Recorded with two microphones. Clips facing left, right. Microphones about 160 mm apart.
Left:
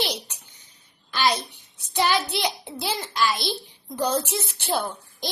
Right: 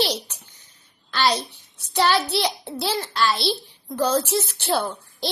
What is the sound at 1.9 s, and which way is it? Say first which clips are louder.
Child singing: right 3 dB; 15° left (ahead or behind).